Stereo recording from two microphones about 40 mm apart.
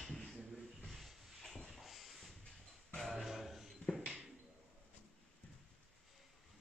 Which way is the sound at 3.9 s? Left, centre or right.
Left.